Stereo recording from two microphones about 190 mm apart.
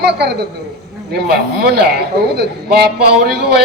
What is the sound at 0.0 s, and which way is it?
A man's voice, 60° right (ahead or behind).